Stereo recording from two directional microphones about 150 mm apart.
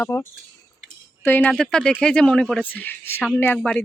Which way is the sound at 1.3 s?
10° left (ahead or behind).